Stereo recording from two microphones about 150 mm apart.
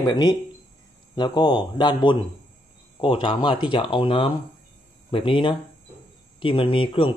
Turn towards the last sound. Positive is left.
turn(degrees=35)  # may be behind; listen again after turning